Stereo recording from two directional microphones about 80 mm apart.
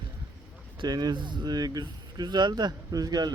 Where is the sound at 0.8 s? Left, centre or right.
Right.